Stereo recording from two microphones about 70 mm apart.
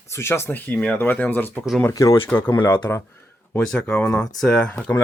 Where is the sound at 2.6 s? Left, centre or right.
Left.